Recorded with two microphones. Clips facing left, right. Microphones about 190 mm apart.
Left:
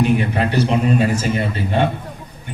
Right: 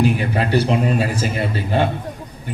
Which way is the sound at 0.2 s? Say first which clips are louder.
Even; 35° right (ahead or behind).